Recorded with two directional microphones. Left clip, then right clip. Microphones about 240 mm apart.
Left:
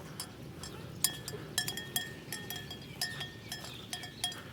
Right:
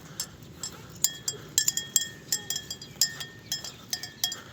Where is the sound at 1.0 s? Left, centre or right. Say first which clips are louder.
Right 6 dB; right.